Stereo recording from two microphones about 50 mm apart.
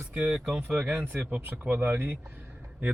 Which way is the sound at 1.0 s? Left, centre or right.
Right.